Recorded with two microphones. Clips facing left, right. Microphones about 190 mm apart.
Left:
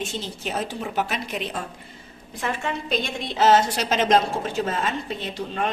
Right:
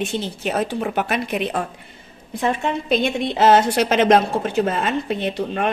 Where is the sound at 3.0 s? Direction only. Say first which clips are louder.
Right 3 dB; 60° right (ahead or behind).